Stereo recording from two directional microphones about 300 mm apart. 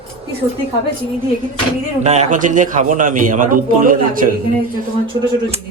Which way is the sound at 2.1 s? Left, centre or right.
Right.